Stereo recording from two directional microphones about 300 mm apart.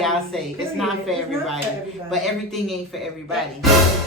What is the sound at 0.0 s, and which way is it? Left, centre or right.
Speech, centre.